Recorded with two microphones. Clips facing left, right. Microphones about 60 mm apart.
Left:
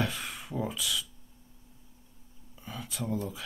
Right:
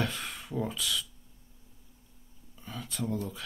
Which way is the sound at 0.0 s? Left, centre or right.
Centre.